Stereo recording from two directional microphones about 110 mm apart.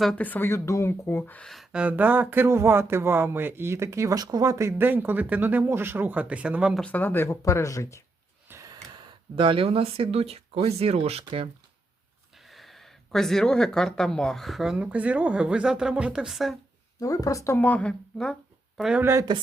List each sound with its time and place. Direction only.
0.2 s speech: 15° left (ahead or behind)
1.5 s speech: centre (ahead or behind)
1.8 s speech: 15° right (ahead or behind)
6.8 s speech: 15° left (ahead or behind)
8.4 s gasp: 30° right (ahead or behind)
9.3 s speech: 55° right (ahead or behind)
12.4 s speech: centre (ahead or behind)
17.0 s speech: 35° left (ahead or behind); by 18.3 s 10° left (ahead or behind)
18.8 s speech: 5° right (ahead or behind)
19.3 s speech: 40° right (ahead or behind)